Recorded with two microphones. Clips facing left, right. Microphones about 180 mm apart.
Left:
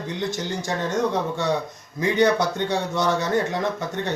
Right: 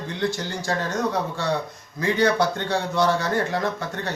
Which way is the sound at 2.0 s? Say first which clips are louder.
Left 1 dB; 20° left (ahead or behind).